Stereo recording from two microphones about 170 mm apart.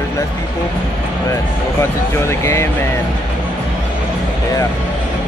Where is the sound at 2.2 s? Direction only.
15° left (ahead or behind).